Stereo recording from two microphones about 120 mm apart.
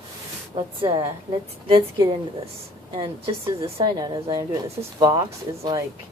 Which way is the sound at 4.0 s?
35° right (ahead or behind).